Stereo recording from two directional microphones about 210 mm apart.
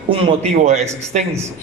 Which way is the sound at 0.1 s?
30° right (ahead or behind).